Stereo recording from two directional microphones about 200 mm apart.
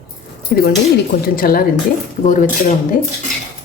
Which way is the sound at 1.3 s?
45° left (ahead or behind).